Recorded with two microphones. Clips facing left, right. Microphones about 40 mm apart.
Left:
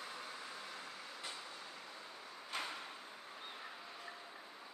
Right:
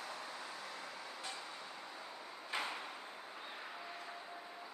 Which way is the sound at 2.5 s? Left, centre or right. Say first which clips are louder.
Right 3 dB; centre.